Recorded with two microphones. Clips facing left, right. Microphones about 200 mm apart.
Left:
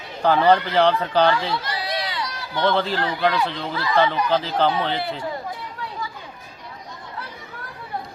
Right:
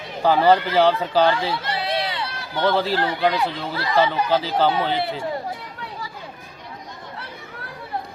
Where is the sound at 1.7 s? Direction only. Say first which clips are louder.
Right 3 dB; 25° right (ahead or behind).